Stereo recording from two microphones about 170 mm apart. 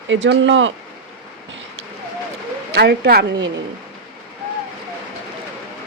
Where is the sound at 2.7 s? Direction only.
75° right (ahead or behind).